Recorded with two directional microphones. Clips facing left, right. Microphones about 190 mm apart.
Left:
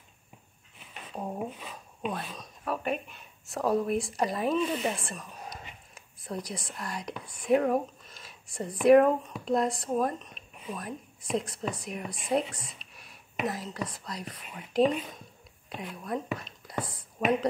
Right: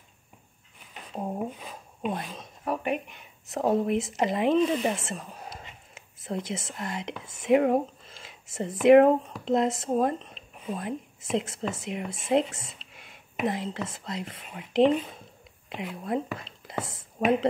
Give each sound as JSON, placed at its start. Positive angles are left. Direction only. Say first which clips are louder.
{"t": 1.1, "sound": "speech", "louder": "right 3 dB", "side_deg": -15}
{"t": 16.4, "sound": "whispering", "louder": "right 1 dB", "side_deg": -25}